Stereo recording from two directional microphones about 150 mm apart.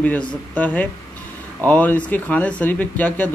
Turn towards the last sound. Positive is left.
turn(degrees=10)  # may be behind; listen again after turning